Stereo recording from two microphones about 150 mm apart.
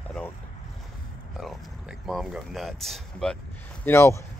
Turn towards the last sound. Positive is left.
turn(degrees=15)  # may be behind; listen again after turning